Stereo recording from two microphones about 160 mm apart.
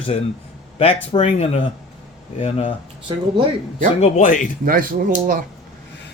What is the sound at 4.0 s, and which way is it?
Speech, 50° left (ahead or behind).